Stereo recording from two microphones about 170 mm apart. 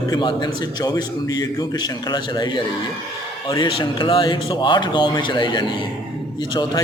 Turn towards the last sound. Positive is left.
turn(degrees=25)  # may be behind; listen again after turning